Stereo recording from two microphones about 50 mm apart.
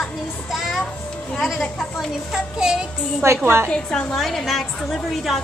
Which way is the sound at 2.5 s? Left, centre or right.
Centre.